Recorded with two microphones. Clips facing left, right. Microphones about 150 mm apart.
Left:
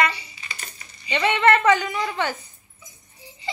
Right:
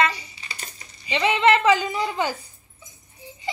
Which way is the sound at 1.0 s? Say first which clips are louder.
Even; 5° right (ahead or behind).